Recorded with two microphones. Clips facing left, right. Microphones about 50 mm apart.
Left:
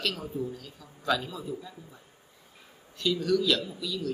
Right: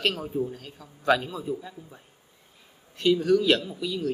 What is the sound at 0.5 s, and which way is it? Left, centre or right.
Speech, right.